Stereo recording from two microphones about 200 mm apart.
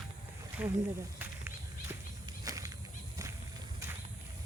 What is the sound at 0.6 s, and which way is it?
Speech, 10° right (ahead or behind).